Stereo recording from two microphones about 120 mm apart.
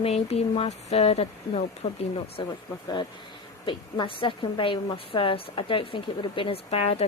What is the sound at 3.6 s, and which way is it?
A woman's voice, 45° left (ahead or behind).